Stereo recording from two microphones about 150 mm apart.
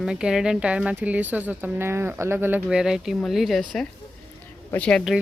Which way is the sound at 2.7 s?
5° right (ahead or behind).